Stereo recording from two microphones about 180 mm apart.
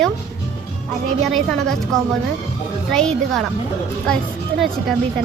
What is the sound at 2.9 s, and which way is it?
A woman's voice, 5° left (ahead or behind).